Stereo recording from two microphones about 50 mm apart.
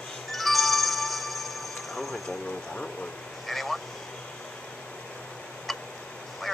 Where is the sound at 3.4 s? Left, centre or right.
Centre.